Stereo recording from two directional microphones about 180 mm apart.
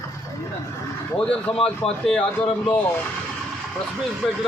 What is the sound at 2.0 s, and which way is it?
Speech, 5° left (ahead or behind).